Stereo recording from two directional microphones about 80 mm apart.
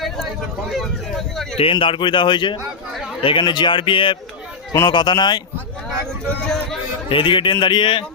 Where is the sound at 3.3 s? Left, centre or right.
Left.